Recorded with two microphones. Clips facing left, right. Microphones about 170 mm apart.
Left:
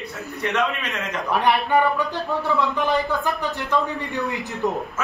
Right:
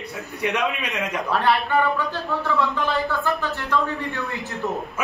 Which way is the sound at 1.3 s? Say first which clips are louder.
Left 2 dB; 15° left (ahead or behind).